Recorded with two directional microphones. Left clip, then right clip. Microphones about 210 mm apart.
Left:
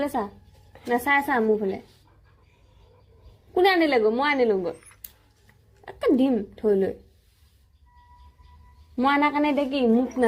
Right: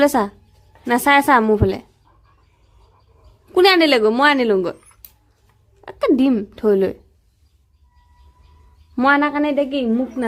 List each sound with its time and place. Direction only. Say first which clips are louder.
0.0 s a woman's voice: right 11 dB; 50° right (ahead or behind)
3.5 s a woman's voice: right 7 dB; 45° right (ahead or behind)
5.8 s speech: right 5 dB; 35° right (ahead or behind)
9.0 s a woman's voice: right 5 dB; 25° right (ahead or behind)